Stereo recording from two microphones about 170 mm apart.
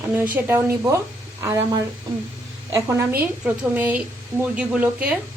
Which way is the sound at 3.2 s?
10° right (ahead or behind).